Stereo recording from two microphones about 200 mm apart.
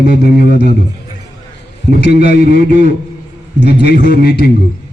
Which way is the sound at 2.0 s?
55° left (ahead or behind).